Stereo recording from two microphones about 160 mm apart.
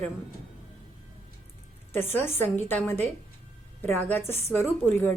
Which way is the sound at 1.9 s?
15° left (ahead or behind).